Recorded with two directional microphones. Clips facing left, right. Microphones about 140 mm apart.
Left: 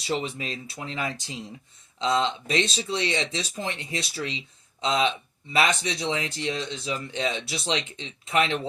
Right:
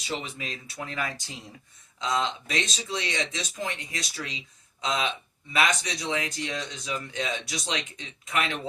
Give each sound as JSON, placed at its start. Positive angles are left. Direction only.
{"t": 0.0, "sound": "speech", "side_deg": 35}